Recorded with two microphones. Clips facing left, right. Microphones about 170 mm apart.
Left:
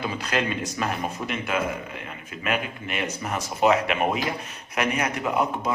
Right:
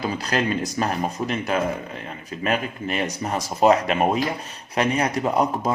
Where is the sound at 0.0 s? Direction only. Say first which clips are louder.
Right 3 dB; 35° right (ahead or behind).